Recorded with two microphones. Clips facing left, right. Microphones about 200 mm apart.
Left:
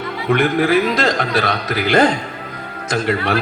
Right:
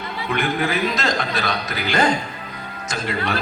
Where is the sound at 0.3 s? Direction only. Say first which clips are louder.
Left 7 dB; 60° left (ahead or behind).